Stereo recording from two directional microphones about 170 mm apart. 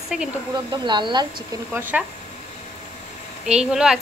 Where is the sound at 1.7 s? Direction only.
10° right (ahead or behind).